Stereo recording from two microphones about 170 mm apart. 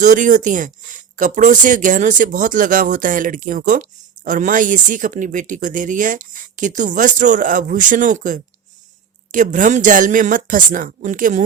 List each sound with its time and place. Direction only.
0.0 s speech: 50° right (ahead or behind)